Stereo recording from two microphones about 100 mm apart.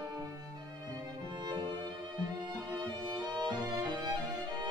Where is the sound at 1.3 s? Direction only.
45° right (ahead or behind).